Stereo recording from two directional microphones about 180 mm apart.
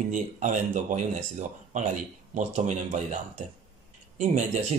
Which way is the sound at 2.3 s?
40° right (ahead or behind).